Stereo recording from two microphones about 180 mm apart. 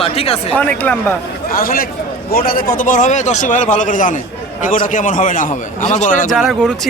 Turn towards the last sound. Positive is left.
turn(degrees=0)  # may be behind; listen again after turning